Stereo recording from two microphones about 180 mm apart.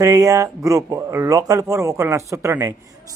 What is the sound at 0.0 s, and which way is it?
A man's voice, 20° right (ahead or behind).